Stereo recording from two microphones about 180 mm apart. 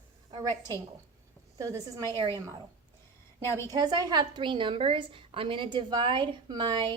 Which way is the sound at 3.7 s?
20° right (ahead or behind).